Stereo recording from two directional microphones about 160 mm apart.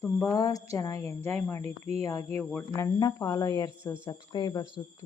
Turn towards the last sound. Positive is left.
turn(degrees=25)  # may be behind; listen again after turning